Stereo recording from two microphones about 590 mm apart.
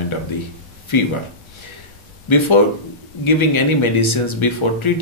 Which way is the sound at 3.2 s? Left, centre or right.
Left.